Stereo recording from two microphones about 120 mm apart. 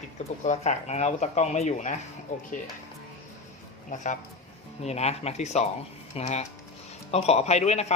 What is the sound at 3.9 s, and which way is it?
Speech, 90° left.